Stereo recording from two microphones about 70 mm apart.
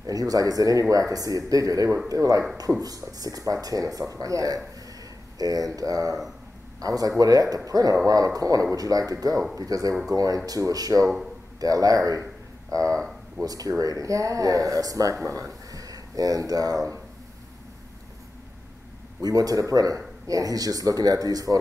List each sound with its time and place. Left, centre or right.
0.0 s a man's voice: right
19.2 s a man's voice: right